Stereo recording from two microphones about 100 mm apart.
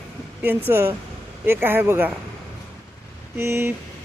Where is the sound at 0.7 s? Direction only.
20° right (ahead or behind).